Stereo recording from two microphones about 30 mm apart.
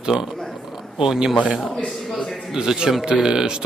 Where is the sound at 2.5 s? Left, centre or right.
Right.